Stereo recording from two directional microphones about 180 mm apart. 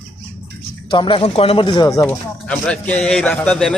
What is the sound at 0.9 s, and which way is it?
Speech, 25° left (ahead or behind).